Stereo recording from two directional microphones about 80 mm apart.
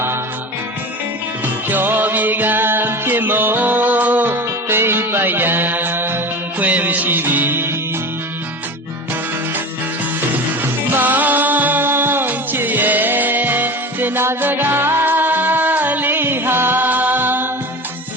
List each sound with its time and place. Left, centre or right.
1.7 s music: right
10.9 s music: right